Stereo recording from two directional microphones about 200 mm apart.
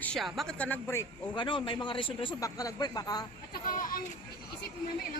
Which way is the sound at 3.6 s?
45° left (ahead or behind).